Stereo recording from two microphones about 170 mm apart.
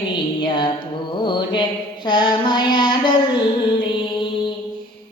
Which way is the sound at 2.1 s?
25° left (ahead or behind).